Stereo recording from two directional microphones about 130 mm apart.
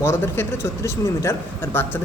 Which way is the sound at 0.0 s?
20° left (ahead or behind).